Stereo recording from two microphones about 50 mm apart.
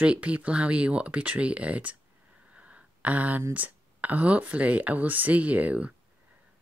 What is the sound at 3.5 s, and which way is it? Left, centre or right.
Speech, right.